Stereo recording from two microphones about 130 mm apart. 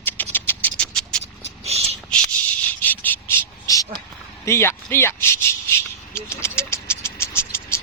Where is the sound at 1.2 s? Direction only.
55° right (ahead or behind).